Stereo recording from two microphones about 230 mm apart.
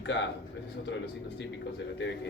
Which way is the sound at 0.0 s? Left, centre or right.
Left.